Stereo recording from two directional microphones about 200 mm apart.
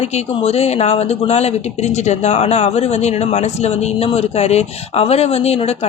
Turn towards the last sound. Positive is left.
turn(degrees=30)  # may be behind; listen again after turning